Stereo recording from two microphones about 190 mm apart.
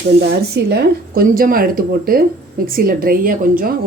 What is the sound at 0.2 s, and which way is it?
Speech, 60° right (ahead or behind).